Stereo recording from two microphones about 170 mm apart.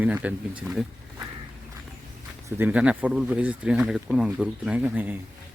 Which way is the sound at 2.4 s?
10° right (ahead or behind).